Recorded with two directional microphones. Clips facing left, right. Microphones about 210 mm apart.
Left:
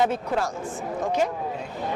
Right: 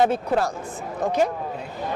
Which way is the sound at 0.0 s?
35° right (ahead or behind).